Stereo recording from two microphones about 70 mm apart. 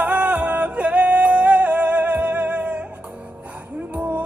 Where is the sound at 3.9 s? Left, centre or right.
Right.